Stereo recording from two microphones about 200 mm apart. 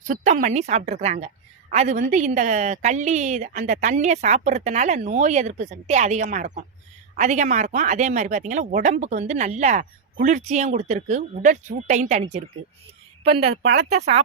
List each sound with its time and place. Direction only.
0.1 s speech: 40° right (ahead or behind)